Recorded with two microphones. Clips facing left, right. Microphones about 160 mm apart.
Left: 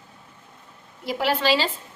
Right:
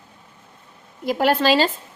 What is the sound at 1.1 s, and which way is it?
Speech, 50° right (ahead or behind).